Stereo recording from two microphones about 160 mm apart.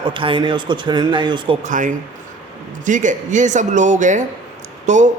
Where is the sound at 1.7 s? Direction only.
50° right (ahead or behind).